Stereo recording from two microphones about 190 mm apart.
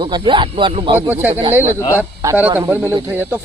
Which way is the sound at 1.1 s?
10° right (ahead or behind).